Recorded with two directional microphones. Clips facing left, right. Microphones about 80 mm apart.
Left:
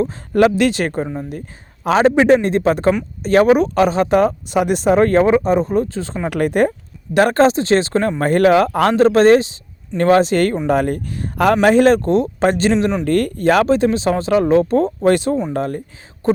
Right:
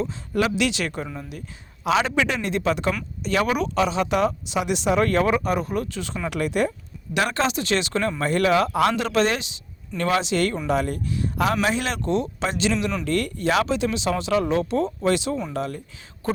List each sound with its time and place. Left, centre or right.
0.0 s speech: left
6.3 s speech: left
12.7 s speech: left
16.2 s beatboxing: left